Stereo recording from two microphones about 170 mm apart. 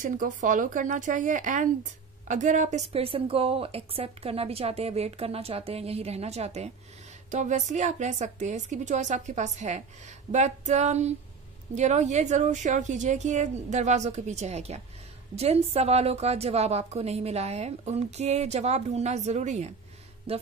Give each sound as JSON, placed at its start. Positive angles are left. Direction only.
{"t": 0.0, "sound": "a woman's voice", "side_deg": -50}